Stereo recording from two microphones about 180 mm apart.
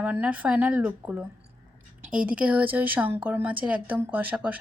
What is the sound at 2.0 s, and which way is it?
Speech, 50° right (ahead or behind).